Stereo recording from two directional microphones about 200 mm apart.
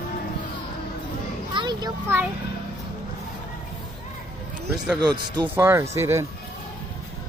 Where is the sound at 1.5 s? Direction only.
25° right (ahead or behind).